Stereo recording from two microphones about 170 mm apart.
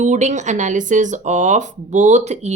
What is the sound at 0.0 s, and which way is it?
Speech, 45° right (ahead or behind).